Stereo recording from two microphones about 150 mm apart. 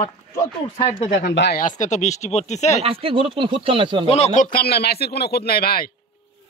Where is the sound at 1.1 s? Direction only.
90° left; by 2.8 s 50° left (ahead or behind).